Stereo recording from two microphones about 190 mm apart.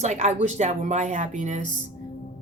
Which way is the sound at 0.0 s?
35° right (ahead or behind).